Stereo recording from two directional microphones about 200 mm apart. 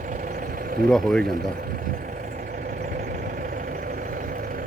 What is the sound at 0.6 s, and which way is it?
Vehicle, 45° right (ahead or behind).